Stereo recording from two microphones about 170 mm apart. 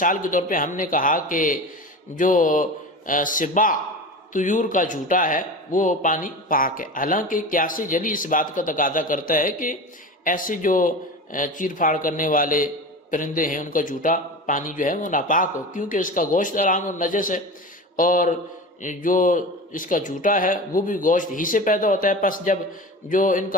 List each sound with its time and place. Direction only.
0.0 s speech: 50° left (ahead or behind)
17.9 s a sound: 50° left (ahead or behind)
18.8 s speech: 50° left (ahead or behind)